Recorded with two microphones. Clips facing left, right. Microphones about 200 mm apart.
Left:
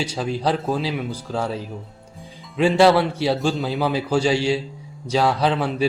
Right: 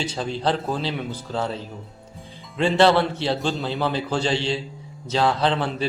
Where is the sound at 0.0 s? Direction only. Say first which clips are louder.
Left 2 dB; 10° left (ahead or behind).